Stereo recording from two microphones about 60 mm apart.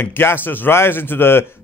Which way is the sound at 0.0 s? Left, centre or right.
Left.